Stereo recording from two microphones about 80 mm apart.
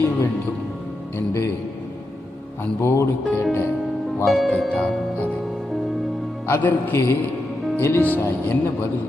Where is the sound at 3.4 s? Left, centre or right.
Left.